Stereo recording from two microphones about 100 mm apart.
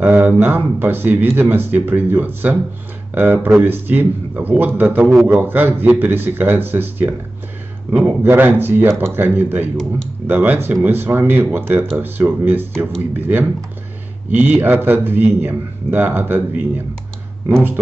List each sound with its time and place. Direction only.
0.0 s speech: 15° right (ahead or behind)
8.2 s speech: 20° right (ahead or behind)